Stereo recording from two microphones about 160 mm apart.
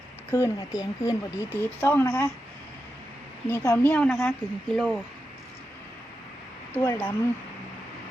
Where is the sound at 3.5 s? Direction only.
15° left (ahead or behind).